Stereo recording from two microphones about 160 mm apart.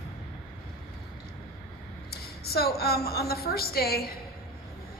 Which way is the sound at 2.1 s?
75° left (ahead or behind).